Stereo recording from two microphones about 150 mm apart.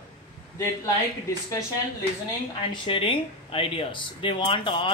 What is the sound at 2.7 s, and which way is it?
Speech, 35° left (ahead or behind).